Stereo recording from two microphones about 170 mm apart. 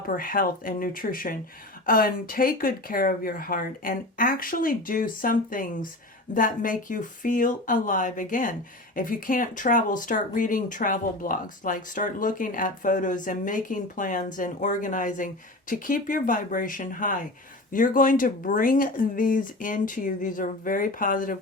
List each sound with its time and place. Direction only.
0.2 s speech: 55° left (ahead or behind)